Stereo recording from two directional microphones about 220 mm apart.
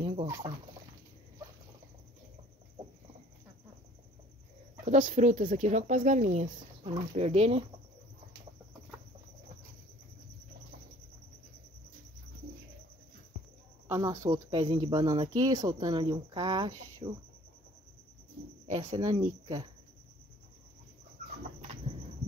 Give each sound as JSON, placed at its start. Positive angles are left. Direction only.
{"t": 0.0, "sound": "turkey", "side_deg": -25}
{"t": 4.8, "sound": "speech", "side_deg": -35}
{"t": 13.8, "sound": "speech", "side_deg": -15}
{"t": 18.7, "sound": "speech", "side_deg": -20}